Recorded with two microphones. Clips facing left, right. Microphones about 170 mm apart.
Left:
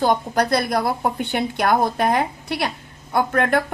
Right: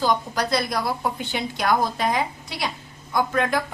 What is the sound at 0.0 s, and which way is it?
A woman's voice, 55° left (ahead or behind).